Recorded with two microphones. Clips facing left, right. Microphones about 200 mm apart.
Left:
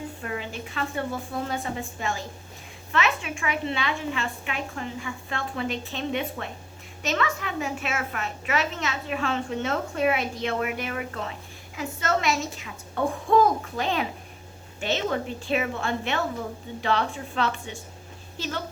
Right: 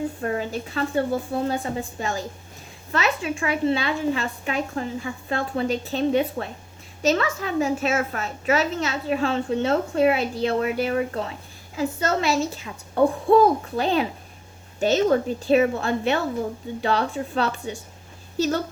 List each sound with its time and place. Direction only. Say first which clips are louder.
0.2 s a woman's voice: right 7 dB; 40° right (ahead or behind)